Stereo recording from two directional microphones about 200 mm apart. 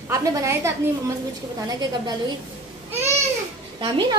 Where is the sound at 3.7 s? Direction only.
20° right (ahead or behind).